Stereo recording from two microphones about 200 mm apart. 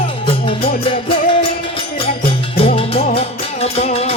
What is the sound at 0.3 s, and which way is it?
Music, 30° left (ahead or behind).